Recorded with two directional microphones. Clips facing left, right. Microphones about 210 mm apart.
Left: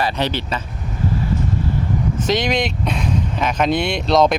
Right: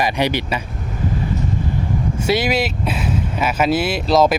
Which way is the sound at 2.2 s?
10° right (ahead or behind).